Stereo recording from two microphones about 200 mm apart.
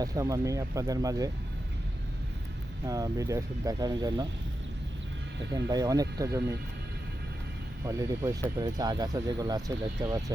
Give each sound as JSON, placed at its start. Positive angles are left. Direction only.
{"t": 0.0, "sound": "speech", "side_deg": -15}
{"t": 2.8, "sound": "speech", "side_deg": -15}
{"t": 5.6, "sound": "speech", "side_deg": -20}
{"t": 7.9, "sound": "speech", "side_deg": -15}